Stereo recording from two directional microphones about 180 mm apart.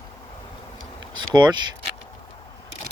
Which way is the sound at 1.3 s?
25° right (ahead or behind).